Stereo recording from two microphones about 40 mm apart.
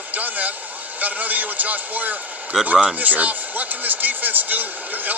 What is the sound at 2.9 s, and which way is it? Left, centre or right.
A man's voice, right.